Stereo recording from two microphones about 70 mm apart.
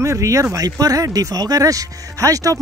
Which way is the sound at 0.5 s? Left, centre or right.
Right.